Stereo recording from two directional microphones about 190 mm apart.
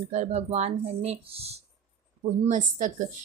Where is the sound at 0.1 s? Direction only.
35° right (ahead or behind).